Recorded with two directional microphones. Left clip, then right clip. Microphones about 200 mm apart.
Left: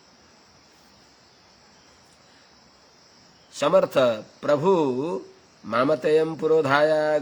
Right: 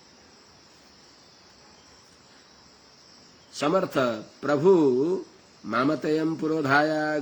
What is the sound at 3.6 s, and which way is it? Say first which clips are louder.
Speech: left 5 dB; 15° left (ahead or behind).